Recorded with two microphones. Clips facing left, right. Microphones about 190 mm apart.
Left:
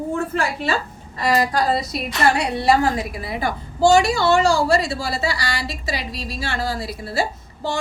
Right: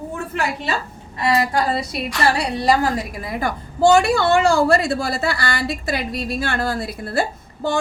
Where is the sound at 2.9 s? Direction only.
45° right (ahead or behind).